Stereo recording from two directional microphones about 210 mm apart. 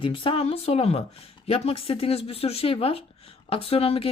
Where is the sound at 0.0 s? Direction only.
25° left (ahead or behind).